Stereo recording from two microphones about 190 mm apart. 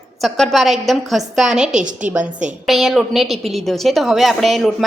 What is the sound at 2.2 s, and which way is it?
Speech, 40° right (ahead or behind).